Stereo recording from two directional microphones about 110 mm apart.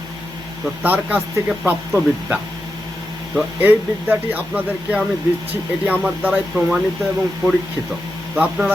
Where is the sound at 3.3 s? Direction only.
15° right (ahead or behind).